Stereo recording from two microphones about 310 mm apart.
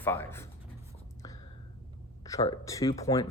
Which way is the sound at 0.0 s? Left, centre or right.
Centre.